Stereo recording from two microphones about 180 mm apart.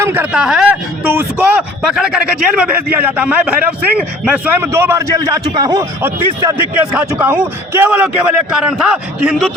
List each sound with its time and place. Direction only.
0.0 s a man's voice: 10° right (ahead or behind)